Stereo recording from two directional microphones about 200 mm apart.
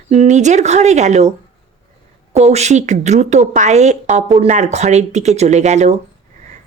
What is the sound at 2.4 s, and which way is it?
A woman's voice, 35° right (ahead or behind).